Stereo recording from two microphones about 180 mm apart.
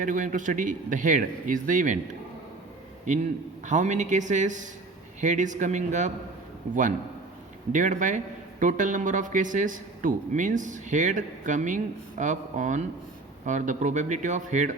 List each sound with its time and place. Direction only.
0.0 s a man's voice: 45° right (ahead or behind)
3.7 s a man's voice: 40° right (ahead or behind)
7.7 s a man's voice: 45° right (ahead or behind)